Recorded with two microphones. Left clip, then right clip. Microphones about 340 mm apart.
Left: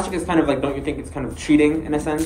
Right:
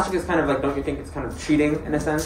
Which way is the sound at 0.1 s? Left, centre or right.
Left.